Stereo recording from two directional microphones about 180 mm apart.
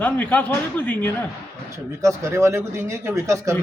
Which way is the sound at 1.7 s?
15° right (ahead or behind).